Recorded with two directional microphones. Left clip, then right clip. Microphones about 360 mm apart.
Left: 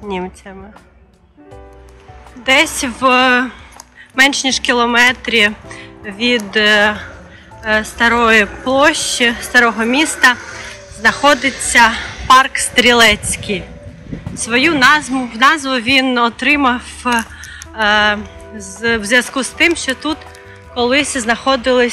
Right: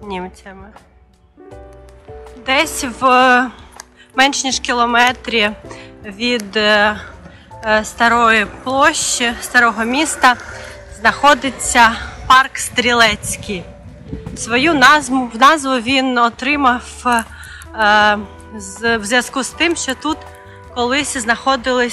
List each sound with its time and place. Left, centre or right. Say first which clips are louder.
0.1 s speech: left 3 dB; centre
2.4 s speech: left 4 dB; centre